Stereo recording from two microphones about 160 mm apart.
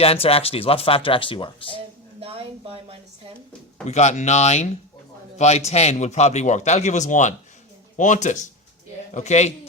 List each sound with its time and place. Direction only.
0.0 s speech: 40° left (ahead or behind)
2.2 s speech: 35° right (ahead or behind)
3.8 s a man's voice: 45° left (ahead or behind)